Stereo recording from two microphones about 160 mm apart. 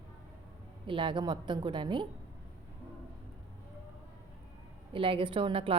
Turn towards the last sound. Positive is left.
turn(degrees=-35)  # may be behind; listen again after turning